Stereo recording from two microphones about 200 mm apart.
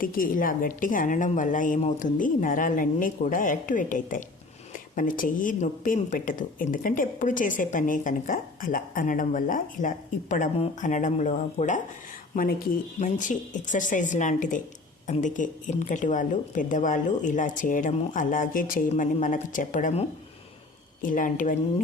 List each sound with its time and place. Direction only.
0.0 s a woman's voice: 45° left (ahead or behind)